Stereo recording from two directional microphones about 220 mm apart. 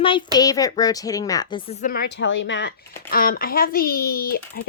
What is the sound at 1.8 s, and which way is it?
Speech, 45° left (ahead or behind).